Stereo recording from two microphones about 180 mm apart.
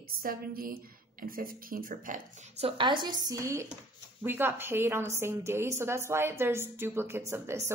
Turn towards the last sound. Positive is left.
turn(degrees=-15)  # may be behind; listen again after turning